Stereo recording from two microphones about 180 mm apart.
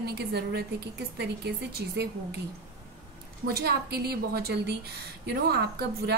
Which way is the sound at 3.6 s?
60° right (ahead or behind).